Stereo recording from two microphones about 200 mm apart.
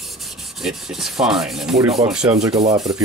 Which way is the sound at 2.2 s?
15° right (ahead or behind).